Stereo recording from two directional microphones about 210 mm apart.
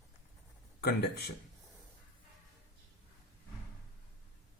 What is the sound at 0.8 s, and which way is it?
Speech, 50° left (ahead or behind).